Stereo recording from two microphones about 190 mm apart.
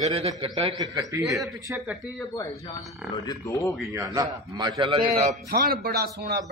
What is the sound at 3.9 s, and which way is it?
Speech, 20° right (ahead or behind).